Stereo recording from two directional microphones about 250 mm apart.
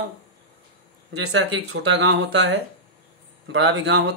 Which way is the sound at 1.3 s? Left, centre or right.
Right.